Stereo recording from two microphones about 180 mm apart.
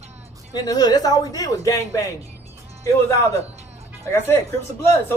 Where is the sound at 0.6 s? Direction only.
20° left (ahead or behind).